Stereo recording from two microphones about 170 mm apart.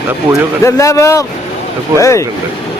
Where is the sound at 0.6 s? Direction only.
15° left (ahead or behind).